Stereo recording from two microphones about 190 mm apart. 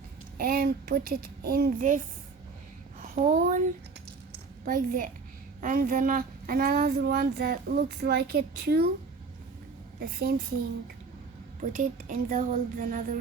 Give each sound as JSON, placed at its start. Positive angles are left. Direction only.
{"t": 0.3, "sound": "a child's voice", "side_deg": -55}
{"t": 3.2, "sound": "speech", "side_deg": -40}
{"t": 4.3, "sound": "a sound", "side_deg": -45}
{"t": 5.5, "sound": "a child's voice", "side_deg": -45}
{"t": 10.0, "sound": "speech", "side_deg": -55}
{"t": 11.7, "sound": "speech", "side_deg": -40}